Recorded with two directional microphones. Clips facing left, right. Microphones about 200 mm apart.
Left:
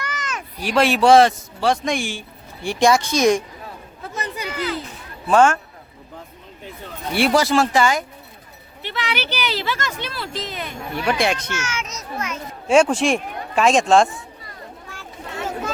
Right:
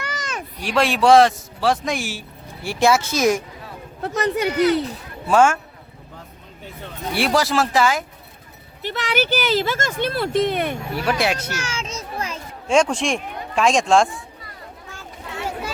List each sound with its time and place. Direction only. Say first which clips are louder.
0.6 s a man's voice: left 2 dB; centre (ahead or behind)
4.0 s speech: right 9 dB; 65° right (ahead or behind)
5.3 s speech: left 1 dB; 10° right (ahead or behind)
7.1 s a man's voice: left 2 dB; centre (ahead or behind)
8.8 s speech: right 4 dB; 45° right (ahead or behind)
10.9 s a man's voice: left 2 dB; 5° right (ahead or behind)
11.5 s a child's voice: even; 30° right (ahead or behind)
12.6 s a man's voice: left 3 dB; 5° left (ahead or behind)